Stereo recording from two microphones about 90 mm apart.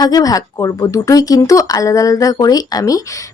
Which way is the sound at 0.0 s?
45° left (ahead or behind).